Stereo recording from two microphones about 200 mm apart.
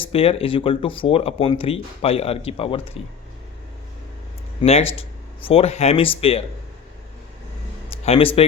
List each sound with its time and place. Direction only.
0.1 s speech: 30° left (ahead or behind)
4.6 s speech: 30° left (ahead or behind)
8.0 s a man's voice: 30° left (ahead or behind)